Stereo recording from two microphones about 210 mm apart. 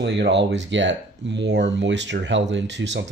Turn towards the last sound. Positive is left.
turn(degrees=-60)  # may be behind; listen again after turning